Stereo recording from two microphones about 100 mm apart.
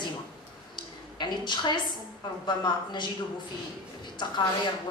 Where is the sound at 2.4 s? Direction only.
50° left (ahead or behind).